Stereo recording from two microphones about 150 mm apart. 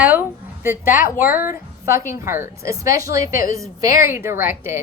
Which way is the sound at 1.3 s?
15° right (ahead or behind).